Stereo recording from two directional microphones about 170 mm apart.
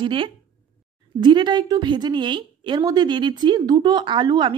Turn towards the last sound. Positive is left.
turn(degrees=-25)  # may be behind; listen again after turning